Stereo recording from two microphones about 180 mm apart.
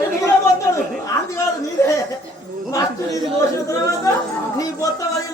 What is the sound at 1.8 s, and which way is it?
Speech, 15° left (ahead or behind).